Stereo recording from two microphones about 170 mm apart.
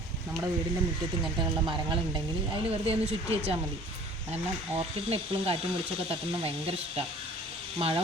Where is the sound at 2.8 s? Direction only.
35° right (ahead or behind).